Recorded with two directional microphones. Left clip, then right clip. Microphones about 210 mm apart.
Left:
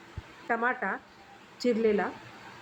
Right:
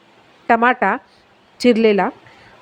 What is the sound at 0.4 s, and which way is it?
A woman's voice, 45° right (ahead or behind).